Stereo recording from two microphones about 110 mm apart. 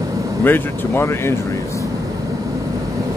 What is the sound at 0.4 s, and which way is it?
Speech, 20° left (ahead or behind).